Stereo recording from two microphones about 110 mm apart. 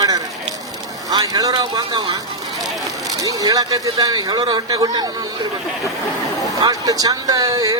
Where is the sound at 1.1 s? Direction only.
35° right (ahead or behind).